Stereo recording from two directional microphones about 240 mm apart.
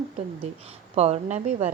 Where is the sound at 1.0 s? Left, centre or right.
Right.